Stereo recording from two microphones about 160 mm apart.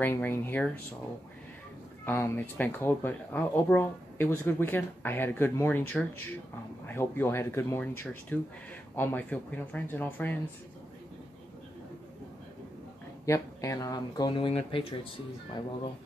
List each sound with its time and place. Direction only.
0.0 s speech: 15° left (ahead or behind)
2.0 s speech: 15° left (ahead or behind)
13.2 s speech: 20° left (ahead or behind); by 15.0 s 35° left (ahead or behind)